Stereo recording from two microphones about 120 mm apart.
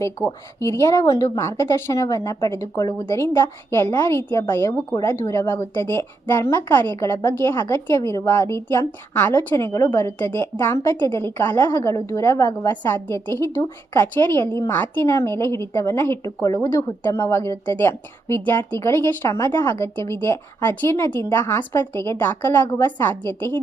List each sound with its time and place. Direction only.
0.0 s a woman's voice: 25° left (ahead or behind)